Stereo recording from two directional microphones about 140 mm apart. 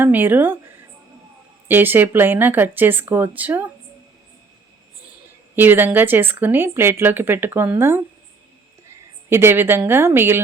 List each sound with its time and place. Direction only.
0.0 s a woman's voice: 15° right (ahead or behind)
1.6 s a woman's voice: 15° right (ahead or behind)
5.5 s a woman's voice: 15° right (ahead or behind)
9.3 s a woman's voice: 15° right (ahead or behind)